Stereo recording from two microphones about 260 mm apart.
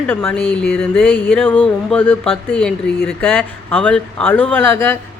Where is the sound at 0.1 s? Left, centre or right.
Centre.